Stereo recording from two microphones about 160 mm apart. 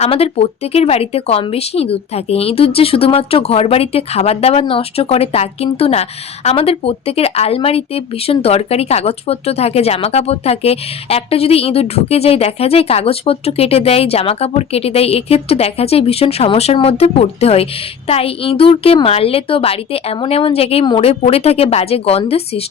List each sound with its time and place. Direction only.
0.0 s speech: 40° left (ahead or behind)